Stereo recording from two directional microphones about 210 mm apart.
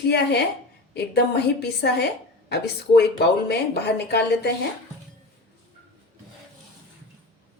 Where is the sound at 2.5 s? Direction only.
50° left (ahead or behind).